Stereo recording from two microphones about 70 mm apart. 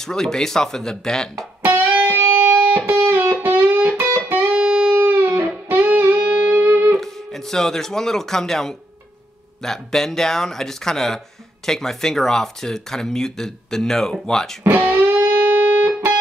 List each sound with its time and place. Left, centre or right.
0.0 s speech: centre
1.6 s music: right
5.0 s music: right
7.0 s speech: centre
14.6 s music: right